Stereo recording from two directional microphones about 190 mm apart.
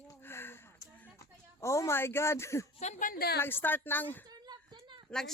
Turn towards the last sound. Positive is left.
turn(degrees=5)  # may be behind; listen again after turning